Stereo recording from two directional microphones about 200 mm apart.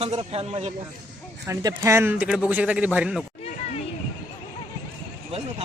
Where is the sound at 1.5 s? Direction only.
15° right (ahead or behind).